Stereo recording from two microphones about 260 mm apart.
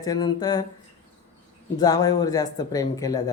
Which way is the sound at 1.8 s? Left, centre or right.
Centre.